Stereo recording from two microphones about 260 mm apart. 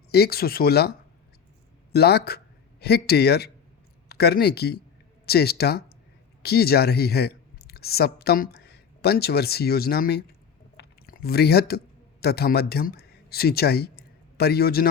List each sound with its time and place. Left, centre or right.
0.1 s speech: left
10.8 s a sound: left
12.2 s speech: left